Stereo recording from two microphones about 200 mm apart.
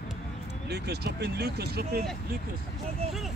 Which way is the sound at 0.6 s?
55° right (ahead or behind).